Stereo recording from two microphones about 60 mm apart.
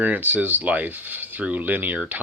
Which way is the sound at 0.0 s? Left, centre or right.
Right.